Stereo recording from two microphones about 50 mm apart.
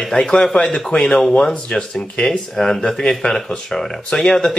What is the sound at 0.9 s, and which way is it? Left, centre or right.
A man's voice, left.